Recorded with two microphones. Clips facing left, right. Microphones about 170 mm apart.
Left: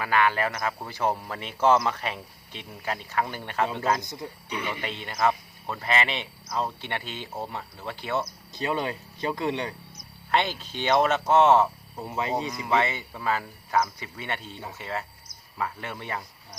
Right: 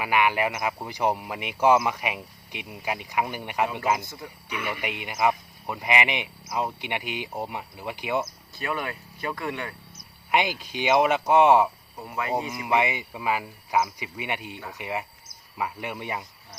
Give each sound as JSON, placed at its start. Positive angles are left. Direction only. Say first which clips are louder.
{"t": 0.0, "sound": "speech", "louder": "right 1 dB", "side_deg": -15}
{"t": 4.0, "sound": "speech", "louder": "left 3 dB", "side_deg": 20}
{"t": 4.8, "sound": "speech", "louder": "right 1 dB", "side_deg": -15}
{"t": 8.5, "sound": "speech", "louder": "left 3 dB", "side_deg": 20}
{"t": 10.3, "sound": "speech", "louder": "right 1 dB", "side_deg": -10}
{"t": 12.0, "sound": "speech", "louder": "left 1 dB", "side_deg": 25}
{"t": 12.5, "sound": "speech", "louder": "right 1 dB", "side_deg": -15}